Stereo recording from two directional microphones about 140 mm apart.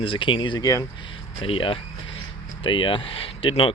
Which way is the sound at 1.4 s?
40° left (ahead or behind).